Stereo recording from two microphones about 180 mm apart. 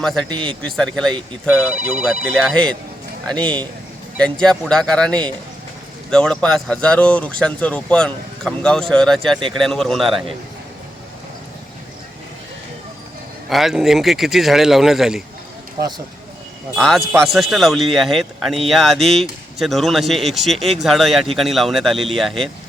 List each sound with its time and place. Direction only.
0.0 s speech: 5° left (ahead or behind)
0.3 s a man's voice: 25° right (ahead or behind)
0.6 s speech: 5° left (ahead or behind)
13.5 s speech: centre (ahead or behind)
16.7 s speech: 5° left (ahead or behind)